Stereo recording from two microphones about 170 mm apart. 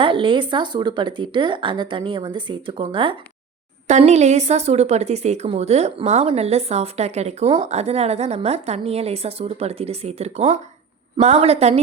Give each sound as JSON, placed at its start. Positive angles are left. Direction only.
{"t": 0.0, "sound": "speech", "side_deg": -30}
{"t": 3.8, "sound": "a woman's voice", "side_deg": -40}